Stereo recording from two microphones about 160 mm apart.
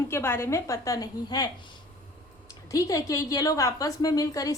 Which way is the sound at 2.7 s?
20° left (ahead or behind).